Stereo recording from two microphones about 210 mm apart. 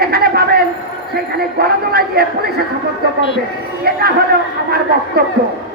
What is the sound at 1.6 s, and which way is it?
Speech, 50° right (ahead or behind).